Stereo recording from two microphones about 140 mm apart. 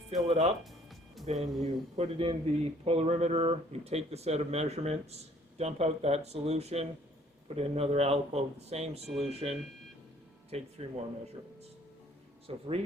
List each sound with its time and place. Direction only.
0.1 s speech: 50° right (ahead or behind)
0.6 s music: centre (ahead or behind)
1.3 s speech: 50° right (ahead or behind)
12.5 s speech: 45° right (ahead or behind)